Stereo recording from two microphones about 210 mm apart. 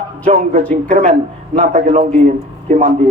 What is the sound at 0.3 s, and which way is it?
Speech, 30° right (ahead or behind).